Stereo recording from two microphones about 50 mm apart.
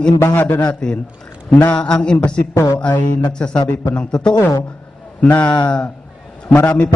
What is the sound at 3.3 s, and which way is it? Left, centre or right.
A man's voice, centre.